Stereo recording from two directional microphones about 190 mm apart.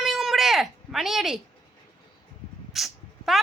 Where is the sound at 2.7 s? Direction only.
Centre (ahead or behind).